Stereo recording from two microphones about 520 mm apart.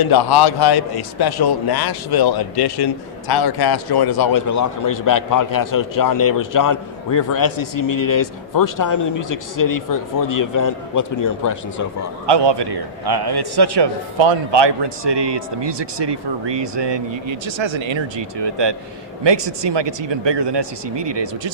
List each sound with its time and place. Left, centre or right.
0.0 s a man's voice: left
12.2 s a man's voice: right